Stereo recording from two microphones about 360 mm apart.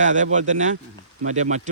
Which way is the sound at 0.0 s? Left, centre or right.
Centre.